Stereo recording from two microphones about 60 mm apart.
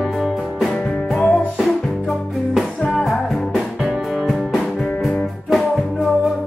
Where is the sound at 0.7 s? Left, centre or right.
Centre.